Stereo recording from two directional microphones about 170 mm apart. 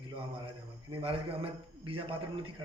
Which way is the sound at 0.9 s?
35° right (ahead or behind).